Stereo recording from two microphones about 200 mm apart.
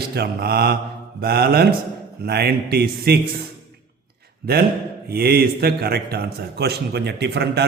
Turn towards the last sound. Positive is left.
turn(degrees=-55)  # may be behind; listen again after turning